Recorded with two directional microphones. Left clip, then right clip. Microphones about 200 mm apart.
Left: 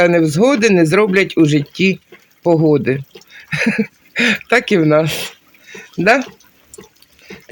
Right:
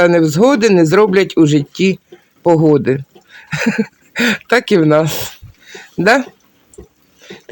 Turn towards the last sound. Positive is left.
turn(degrees=-10)  # may be behind; listen again after turning